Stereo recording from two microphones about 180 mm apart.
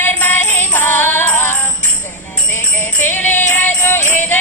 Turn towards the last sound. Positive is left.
turn(degrees=10)  # may be behind; listen again after turning